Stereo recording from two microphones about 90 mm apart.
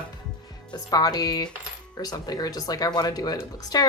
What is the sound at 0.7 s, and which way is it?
Speech, 45° left (ahead or behind).